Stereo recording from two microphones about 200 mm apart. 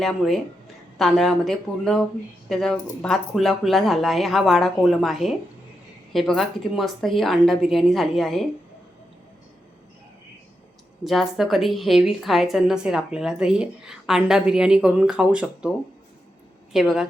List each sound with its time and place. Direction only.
0.0 s a woman's voice: centre (ahead or behind)
11.0 s a woman's voice: centre (ahead or behind)
16.7 s a woman's voice: centre (ahead or behind)